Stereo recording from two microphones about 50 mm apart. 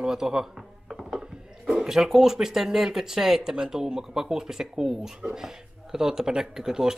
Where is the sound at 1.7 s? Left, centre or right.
Centre.